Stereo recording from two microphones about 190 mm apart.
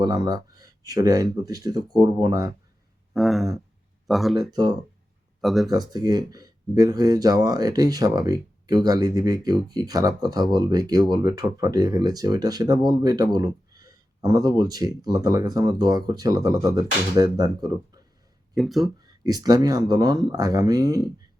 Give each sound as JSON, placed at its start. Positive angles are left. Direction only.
{"t": 0.0, "sound": "speech", "side_deg": -20}
{"t": 3.1, "sound": "a sound", "side_deg": 0}
{"t": 4.0, "sound": "speech", "side_deg": 0}
{"t": 4.4, "sound": "speech", "side_deg": -20}
{"t": 5.4, "sound": "speech", "side_deg": 0}
{"t": 5.7, "sound": "speech", "side_deg": -20}
{"t": 18.5, "sound": "speech", "side_deg": 0}
{"t": 19.0, "sound": "speech", "side_deg": -20}